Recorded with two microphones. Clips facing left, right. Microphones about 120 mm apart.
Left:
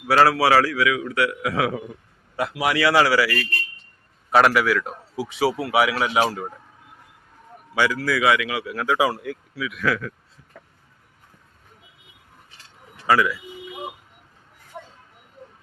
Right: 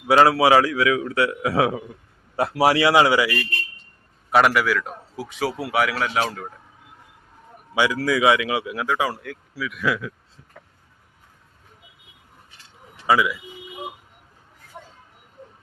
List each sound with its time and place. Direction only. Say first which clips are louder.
0.1 s a man's voice: right 2 dB; 20° right (ahead or behind)
4.3 s a man's voice: left 1 dB; centre (ahead or behind)
7.7 s a man's voice: right 1 dB; 15° right (ahead or behind)
8.9 s a man's voice: left 4 dB; 10° left (ahead or behind)
13.1 s speech: even; 15° right (ahead or behind)